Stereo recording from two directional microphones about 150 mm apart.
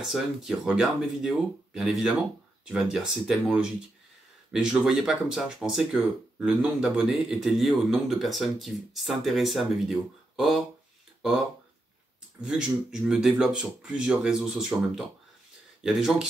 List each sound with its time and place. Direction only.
0.0 s speech: centre (ahead or behind)
12.4 s speech: 5° right (ahead or behind)